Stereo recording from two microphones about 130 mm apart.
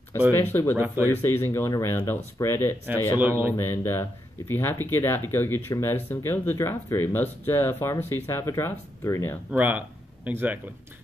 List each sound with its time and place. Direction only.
0.4 s speech: 15° left (ahead or behind)
0.7 s a man's voice: 15° right (ahead or behind)
1.0 s speech: 15° left (ahead or behind)
3.2 s a man's voice: 15° right (ahead or behind)
3.5 s speech: 20° left (ahead or behind)
9.5 s speech: 10° right (ahead or behind)